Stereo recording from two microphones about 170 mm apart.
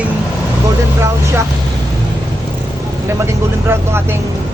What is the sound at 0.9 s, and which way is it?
Vehicle, 15° right (ahead or behind).